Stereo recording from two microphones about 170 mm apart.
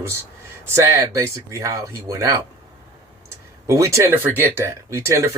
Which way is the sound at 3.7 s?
15° right (ahead or behind).